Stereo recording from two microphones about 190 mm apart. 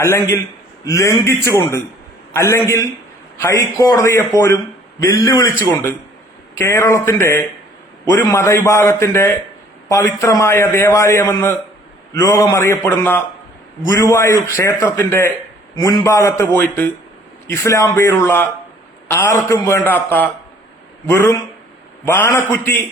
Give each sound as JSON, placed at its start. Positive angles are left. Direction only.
{"t": 0.0, "sound": "a man's voice", "side_deg": 15}